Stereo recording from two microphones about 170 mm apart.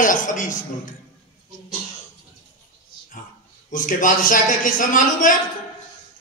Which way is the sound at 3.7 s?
50° left (ahead or behind).